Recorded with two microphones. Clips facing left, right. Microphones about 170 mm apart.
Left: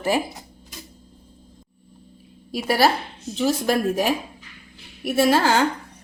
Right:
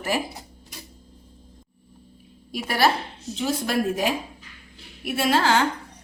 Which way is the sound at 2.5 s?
35° left (ahead or behind).